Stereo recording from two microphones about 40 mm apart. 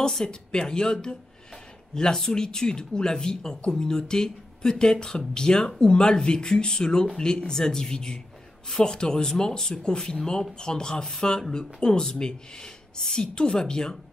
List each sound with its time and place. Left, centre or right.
0.0 s speech: centre